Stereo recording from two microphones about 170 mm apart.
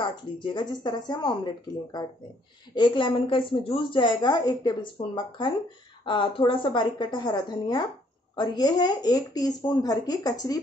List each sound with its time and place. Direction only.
0.0 s a woman's voice: 30° left (ahead or behind)